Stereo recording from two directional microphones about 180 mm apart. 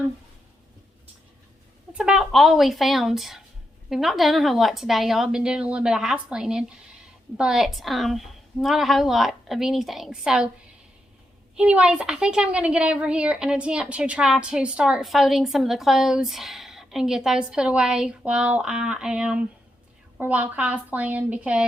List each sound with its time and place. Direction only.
1.9 s a woman's voice: 5° right (ahead or behind)
11.5 s a woman's voice: 5° right (ahead or behind)